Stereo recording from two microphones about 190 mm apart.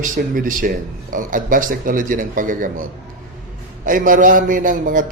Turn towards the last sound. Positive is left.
turn(degrees=-45)  # may be behind; listen again after turning